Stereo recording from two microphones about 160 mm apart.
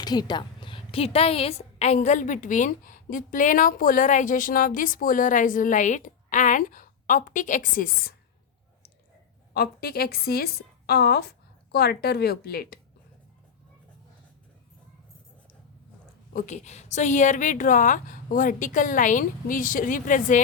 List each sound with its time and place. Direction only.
0.0 s a woman's voice: 25° left (ahead or behind); by 8.1 s 65° left (ahead or behind)
9.6 s a woman's voice: 70° left (ahead or behind)
16.3 s a woman's voice: 50° left (ahead or behind)